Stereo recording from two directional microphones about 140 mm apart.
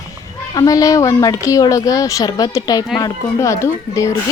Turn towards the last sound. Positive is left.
turn(degrees=20)  # may be behind; listen again after turning